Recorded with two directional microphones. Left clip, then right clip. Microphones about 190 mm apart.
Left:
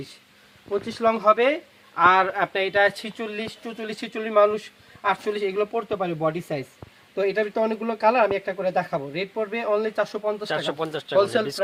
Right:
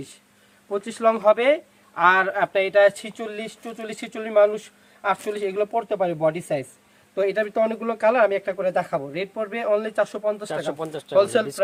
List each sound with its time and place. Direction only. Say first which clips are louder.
0.7 s speech: right 1 dB; 20° right (ahead or behind)
10.4 s speech: left 1 dB; 10° right (ahead or behind)